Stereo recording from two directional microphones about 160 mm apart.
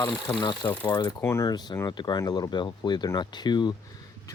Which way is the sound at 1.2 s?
15° left (ahead or behind).